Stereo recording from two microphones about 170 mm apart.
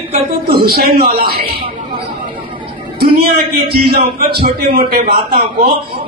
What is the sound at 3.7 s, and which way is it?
Speech, 60° right (ahead or behind).